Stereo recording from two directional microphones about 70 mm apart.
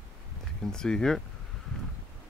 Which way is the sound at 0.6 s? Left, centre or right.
Centre.